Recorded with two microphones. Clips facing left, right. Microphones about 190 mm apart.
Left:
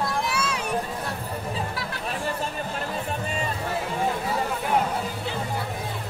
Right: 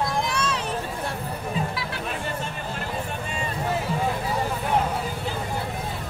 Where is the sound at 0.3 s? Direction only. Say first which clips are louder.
Right 1 dB; 10° left (ahead or behind).